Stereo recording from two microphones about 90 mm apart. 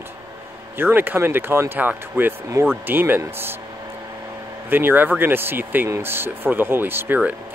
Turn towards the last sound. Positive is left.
turn(degrees=-20)  # may be behind; listen again after turning